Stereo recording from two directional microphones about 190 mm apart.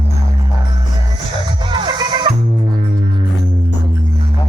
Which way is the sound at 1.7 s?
20° right (ahead or behind).